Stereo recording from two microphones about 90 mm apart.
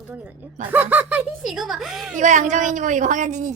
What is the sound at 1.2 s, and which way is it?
Speech, 5° right (ahead or behind).